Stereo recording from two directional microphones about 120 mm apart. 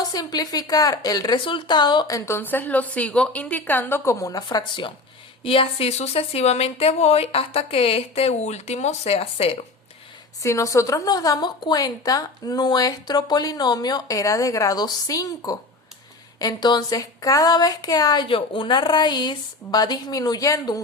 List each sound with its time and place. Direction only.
0.0 s a woman's voice: 35° left (ahead or behind)
2.1 s a woman's voice: 20° left (ahead or behind); by 9.6 s 55° left (ahead or behind)
10.4 s a woman's voice: 25° left (ahead or behind)